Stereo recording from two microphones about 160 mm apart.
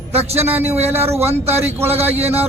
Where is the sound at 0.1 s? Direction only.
40° right (ahead or behind).